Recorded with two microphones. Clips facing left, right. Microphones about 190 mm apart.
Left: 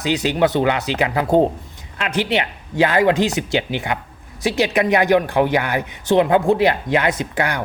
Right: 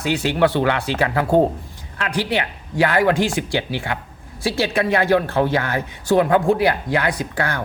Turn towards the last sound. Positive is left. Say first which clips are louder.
# left 2 dB
turn(degrees=15)  # may be behind; listen again after turning